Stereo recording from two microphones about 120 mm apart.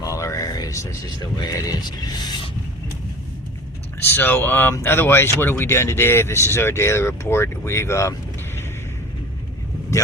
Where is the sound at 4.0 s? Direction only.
15° left (ahead or behind).